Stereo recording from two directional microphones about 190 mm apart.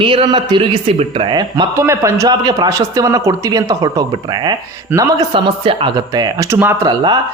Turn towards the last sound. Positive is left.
turn(degrees=-20)  # may be behind; listen again after turning